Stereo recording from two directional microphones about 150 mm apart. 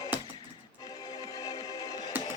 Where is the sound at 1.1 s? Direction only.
25° left (ahead or behind).